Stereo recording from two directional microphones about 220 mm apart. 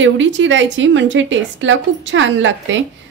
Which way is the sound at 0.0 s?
55° right (ahead or behind).